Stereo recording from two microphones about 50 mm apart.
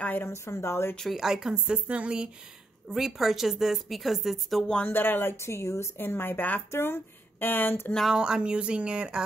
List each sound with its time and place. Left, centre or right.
0.0 s a sound: left
0.3 s speech: left
1.0 s a woman's voice: centre
2.9 s a woman's voice: centre
4.8 s speech: left
5.9 s speech: left
6.7 s speech: left
8.2 s a woman's voice: centre